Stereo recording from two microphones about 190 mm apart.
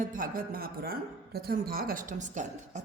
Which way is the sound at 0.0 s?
45° right (ahead or behind).